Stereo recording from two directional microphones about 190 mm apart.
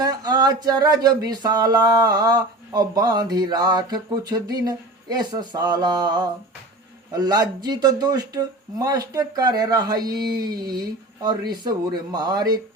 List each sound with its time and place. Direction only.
0.0 s speech: 20° right (ahead or behind)